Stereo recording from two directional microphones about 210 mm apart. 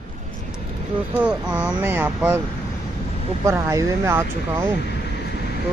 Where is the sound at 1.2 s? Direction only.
5° right (ahead or behind).